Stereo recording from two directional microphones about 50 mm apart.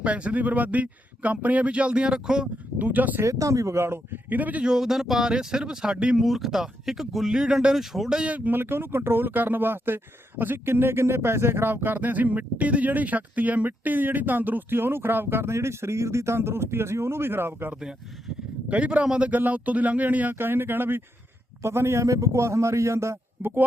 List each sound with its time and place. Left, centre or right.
0.0 s speech: right
2.7 s speech: right
3.2 s speech: right
4.1 s speech: right
4.6 s a man's voice: centre
6.1 s speech: centre
8.4 s speech: right
11.7 s speech: right
18.7 s speech: right
19.0 s speech: centre
19.3 s speech: right
20.4 s speech: right
21.6 s a man's voice: right
23.4 s speech: right